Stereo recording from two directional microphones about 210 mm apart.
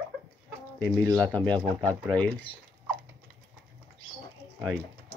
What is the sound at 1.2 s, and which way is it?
Speech, 5° left (ahead or behind).